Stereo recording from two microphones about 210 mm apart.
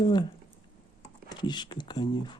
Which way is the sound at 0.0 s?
20° left (ahead or behind).